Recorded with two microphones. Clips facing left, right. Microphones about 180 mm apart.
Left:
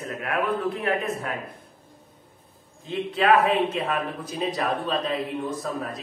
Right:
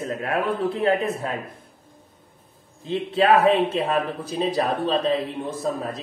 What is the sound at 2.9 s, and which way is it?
Speech, 30° right (ahead or behind).